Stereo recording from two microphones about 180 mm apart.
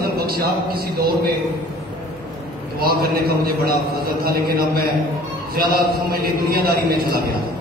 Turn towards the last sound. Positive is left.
turn(degrees=-55)  # may be behind; listen again after turning